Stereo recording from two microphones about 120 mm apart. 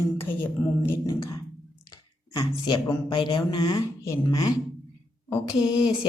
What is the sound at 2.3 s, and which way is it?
Speech, 40° left (ahead or behind).